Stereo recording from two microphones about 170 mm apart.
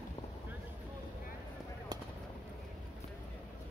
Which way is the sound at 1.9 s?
25° right (ahead or behind).